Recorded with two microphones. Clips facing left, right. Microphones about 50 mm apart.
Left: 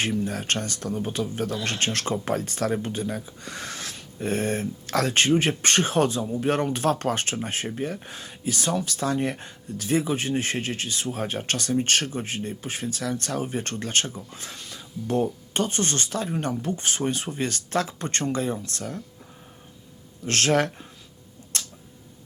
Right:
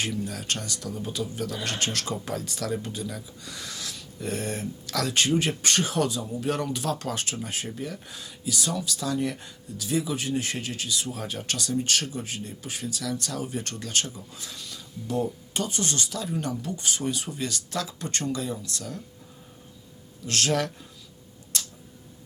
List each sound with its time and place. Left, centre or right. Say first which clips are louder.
0.0 s speech: left 4 dB; left
20.2 s speech: left 4 dB; left